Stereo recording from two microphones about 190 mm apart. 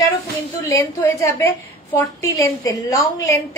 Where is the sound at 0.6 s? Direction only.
15° left (ahead or behind).